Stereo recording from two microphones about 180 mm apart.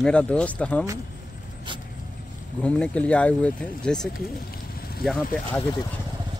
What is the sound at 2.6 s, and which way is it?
Speech, 5° left (ahead or behind).